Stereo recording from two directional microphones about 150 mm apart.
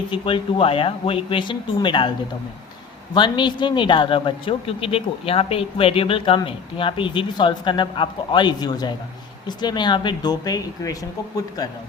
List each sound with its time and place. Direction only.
0.1 s a man's voice: 35° left (ahead or behind)
3.2 s a man's voice: 30° left (ahead or behind)